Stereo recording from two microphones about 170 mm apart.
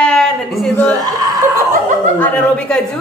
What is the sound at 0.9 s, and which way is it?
Speech, 20° right (ahead or behind).